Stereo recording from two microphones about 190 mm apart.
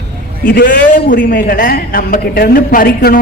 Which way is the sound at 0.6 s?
45° left (ahead or behind).